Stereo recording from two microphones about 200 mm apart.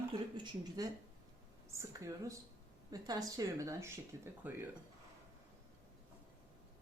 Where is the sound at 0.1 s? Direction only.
20° right (ahead or behind).